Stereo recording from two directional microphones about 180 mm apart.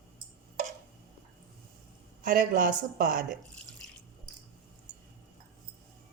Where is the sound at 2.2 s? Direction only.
50° right (ahead or behind).